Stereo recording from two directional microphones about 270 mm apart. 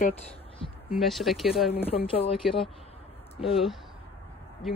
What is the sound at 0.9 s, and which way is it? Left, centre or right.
Speech, centre.